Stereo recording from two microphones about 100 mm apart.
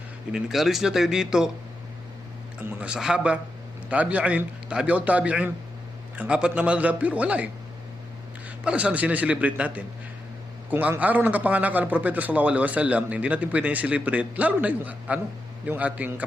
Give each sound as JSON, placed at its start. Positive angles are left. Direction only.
{"t": 0.3, "sound": "speech", "side_deg": -5}
{"t": 2.8, "sound": "a man's voice", "side_deg": -10}